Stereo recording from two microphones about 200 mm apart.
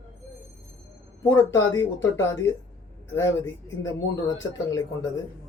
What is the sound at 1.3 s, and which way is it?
Speech, 10° left (ahead or behind).